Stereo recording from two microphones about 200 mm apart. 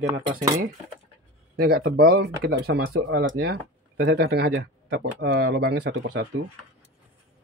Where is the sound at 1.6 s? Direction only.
50° right (ahead or behind).